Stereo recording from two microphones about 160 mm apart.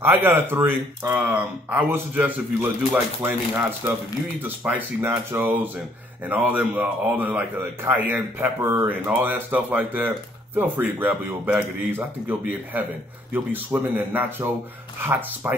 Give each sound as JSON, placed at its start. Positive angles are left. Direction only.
{"t": 0.0, "sound": "a man's voice", "side_deg": -15}